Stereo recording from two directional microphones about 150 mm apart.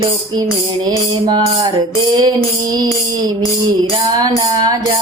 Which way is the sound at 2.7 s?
25° right (ahead or behind).